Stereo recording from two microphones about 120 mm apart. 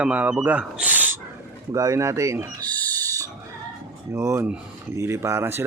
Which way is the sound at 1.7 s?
30° right (ahead or behind).